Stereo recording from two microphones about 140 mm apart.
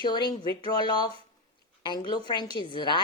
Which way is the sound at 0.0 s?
35° left (ahead or behind).